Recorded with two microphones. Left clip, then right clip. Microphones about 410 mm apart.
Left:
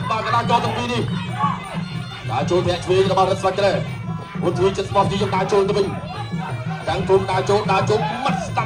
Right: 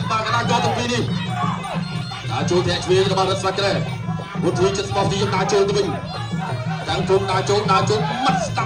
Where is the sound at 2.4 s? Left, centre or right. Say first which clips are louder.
Right 1 dB; centre.